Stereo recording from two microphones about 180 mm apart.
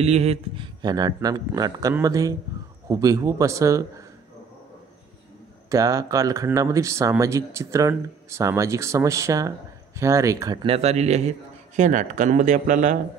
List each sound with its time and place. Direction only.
0.0 s a man's voice: 35° right (ahead or behind)
0.8 s speech: 20° right (ahead or behind)
5.7 s a man's voice: 20° right (ahead or behind); by 12.9 s 45° right (ahead or behind)